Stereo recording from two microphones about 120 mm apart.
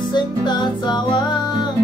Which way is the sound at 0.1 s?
40° left (ahead or behind).